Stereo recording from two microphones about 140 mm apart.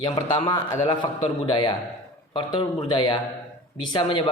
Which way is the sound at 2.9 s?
35° left (ahead or behind).